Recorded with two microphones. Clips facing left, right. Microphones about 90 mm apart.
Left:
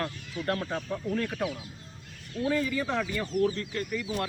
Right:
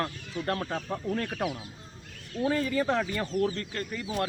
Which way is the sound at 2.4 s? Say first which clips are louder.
Right 2 dB; 35° right (ahead or behind).